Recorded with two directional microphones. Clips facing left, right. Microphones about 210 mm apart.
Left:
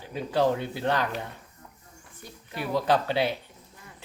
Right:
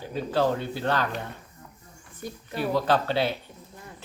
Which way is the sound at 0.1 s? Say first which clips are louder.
Even; 15° left (ahead or behind).